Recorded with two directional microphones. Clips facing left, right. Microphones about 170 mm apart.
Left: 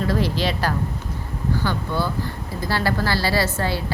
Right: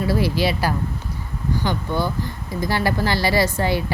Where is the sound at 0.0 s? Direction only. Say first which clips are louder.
Right 2 dB; 10° right (ahead or behind).